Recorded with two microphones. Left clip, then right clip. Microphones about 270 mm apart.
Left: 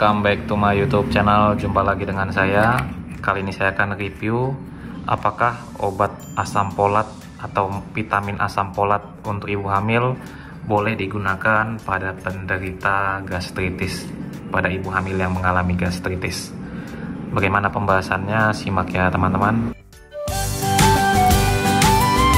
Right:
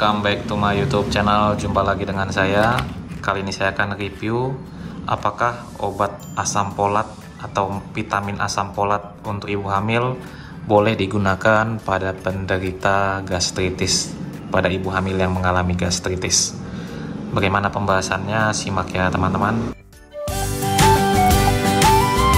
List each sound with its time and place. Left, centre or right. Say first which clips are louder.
0.0 s speech: left 1 dB; centre
20.2 s music: even; centre